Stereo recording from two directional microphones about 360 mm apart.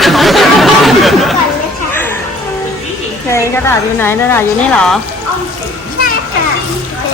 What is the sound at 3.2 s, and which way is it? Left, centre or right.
A woman's voice, centre.